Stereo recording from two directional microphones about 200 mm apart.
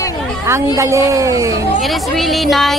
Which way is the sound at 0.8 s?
15° right (ahead or behind).